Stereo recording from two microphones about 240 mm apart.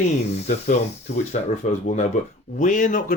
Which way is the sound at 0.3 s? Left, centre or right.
Left.